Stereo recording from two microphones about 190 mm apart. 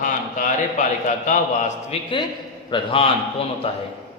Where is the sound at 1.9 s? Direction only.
30° left (ahead or behind).